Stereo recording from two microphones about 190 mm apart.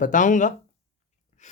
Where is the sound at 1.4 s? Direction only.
40° left (ahead or behind).